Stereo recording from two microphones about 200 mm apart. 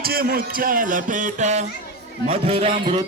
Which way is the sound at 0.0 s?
50° right (ahead or behind).